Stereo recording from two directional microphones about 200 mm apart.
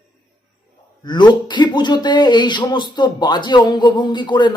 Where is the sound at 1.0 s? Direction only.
20° left (ahead or behind).